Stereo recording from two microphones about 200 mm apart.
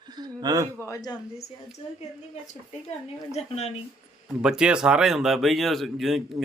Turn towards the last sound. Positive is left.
turn(degrees=0)  # may be behind; listen again after turning